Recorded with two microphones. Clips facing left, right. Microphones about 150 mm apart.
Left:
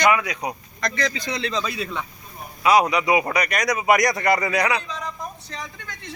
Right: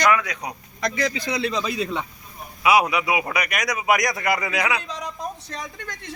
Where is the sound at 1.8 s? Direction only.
20° right (ahead or behind).